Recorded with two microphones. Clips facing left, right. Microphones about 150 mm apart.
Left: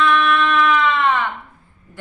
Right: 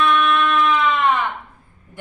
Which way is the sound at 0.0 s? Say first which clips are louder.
Left 1 dB; 20° right (ahead or behind).